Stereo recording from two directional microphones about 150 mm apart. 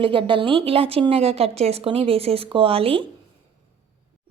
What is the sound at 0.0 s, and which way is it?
Speech, 35° right (ahead or behind).